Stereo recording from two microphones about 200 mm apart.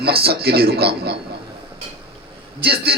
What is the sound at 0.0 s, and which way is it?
A man's voice, 50° right (ahead or behind).